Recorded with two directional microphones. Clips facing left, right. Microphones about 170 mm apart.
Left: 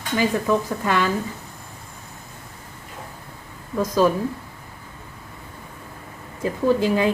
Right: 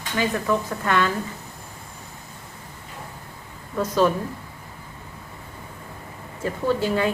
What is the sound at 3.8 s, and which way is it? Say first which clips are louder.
Speech: left 1 dB; 10° left (ahead or behind).